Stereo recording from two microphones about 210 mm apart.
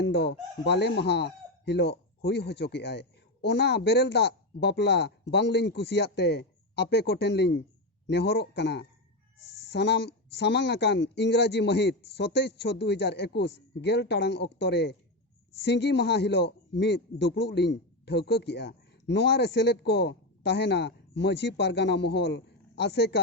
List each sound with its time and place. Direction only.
0.0 s a man's voice: 55° left (ahead or behind)